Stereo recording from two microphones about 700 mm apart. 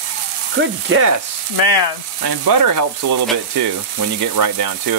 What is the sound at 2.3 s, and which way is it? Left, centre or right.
Sizzle, right.